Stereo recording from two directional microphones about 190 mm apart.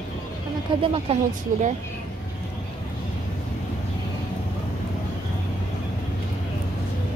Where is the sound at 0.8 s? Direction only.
30° right (ahead or behind).